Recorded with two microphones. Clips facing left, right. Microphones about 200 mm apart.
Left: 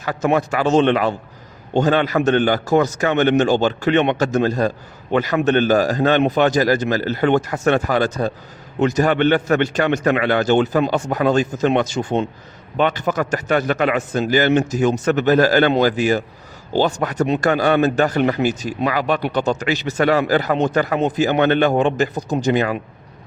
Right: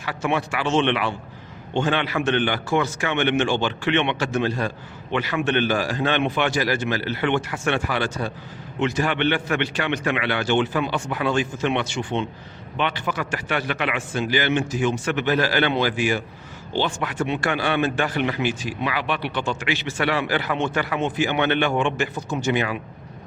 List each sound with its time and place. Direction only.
0.0 s speech: 40° left (ahead or behind)